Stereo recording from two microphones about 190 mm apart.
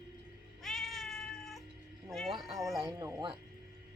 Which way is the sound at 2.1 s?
Centre (ahead or behind).